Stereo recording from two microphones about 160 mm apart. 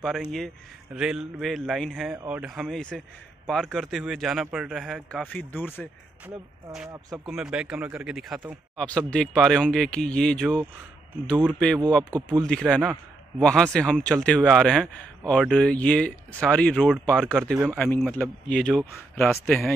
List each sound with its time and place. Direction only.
0.0 s speech: centre (ahead or behind)
6.2 s speech: 5° right (ahead or behind)
12.0 s speech: 25° right (ahead or behind)
12.4 s speech: 5° left (ahead or behind)